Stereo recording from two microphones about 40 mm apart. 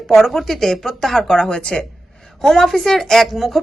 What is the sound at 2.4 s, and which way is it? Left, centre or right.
Speech, centre.